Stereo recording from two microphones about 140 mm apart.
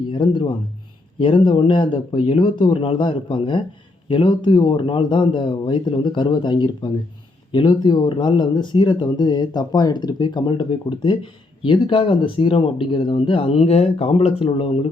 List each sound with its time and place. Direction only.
0.1 s speech: 35° left (ahead or behind)